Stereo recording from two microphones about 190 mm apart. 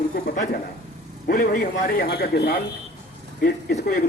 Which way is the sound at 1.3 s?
45° left (ahead or behind).